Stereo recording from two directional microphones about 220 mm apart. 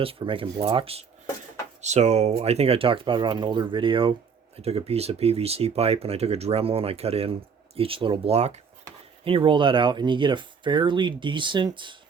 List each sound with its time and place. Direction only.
0.0 s speech: 25° right (ahead or behind)